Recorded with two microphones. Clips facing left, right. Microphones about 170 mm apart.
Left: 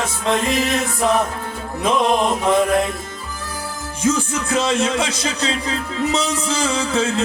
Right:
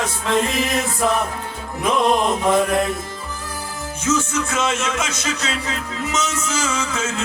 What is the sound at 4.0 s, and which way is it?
Speech, 35° left (ahead or behind).